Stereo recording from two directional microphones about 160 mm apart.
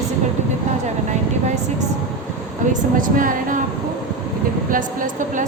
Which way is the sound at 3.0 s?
55° right (ahead or behind).